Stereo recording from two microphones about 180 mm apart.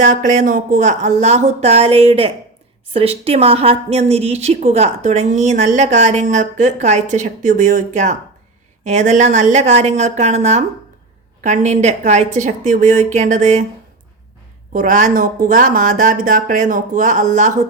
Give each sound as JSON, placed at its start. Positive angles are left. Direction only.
{"t": 0.0, "sound": "a woman's voice", "side_deg": -45}
{"t": 14.7, "sound": "speech", "side_deg": -45}